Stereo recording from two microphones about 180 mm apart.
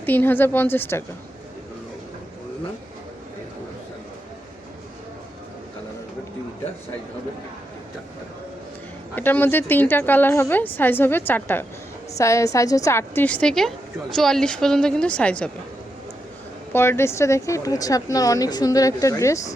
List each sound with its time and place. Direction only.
0.0 s a woman's voice: 10° left (ahead or behind)
9.1 s a woman's voice: 10° left (ahead or behind)
16.7 s speech: 15° left (ahead or behind)